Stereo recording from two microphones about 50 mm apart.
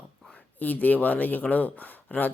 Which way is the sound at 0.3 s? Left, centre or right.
Left.